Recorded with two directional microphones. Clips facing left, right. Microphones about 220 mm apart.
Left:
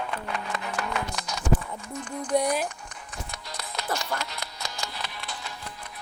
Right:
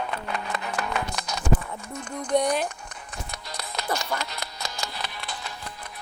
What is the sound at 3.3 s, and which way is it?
Music, 40° right (ahead or behind).